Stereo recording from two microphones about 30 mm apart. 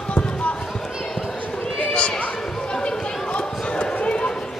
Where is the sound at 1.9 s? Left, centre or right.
Left.